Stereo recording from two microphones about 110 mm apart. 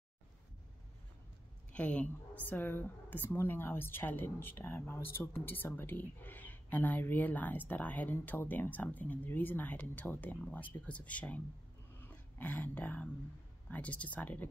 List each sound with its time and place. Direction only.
1.7 s a woman's voice: 10° left (ahead or behind)